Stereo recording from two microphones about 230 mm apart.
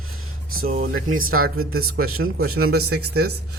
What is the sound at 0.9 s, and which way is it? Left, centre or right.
Speech, right.